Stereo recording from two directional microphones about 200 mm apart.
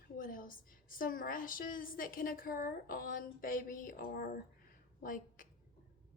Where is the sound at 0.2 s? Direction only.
45° left (ahead or behind).